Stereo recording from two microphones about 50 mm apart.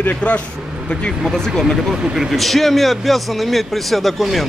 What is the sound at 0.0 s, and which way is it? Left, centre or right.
Speech, left.